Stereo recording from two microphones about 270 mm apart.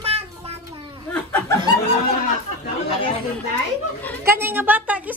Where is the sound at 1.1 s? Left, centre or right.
Centre.